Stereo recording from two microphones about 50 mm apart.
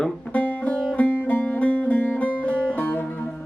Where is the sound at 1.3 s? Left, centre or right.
Left.